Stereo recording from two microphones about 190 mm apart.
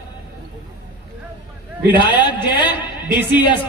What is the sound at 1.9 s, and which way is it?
A man's voice, 25° left (ahead or behind).